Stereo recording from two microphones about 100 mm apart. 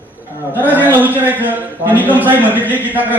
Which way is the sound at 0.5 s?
15° right (ahead or behind).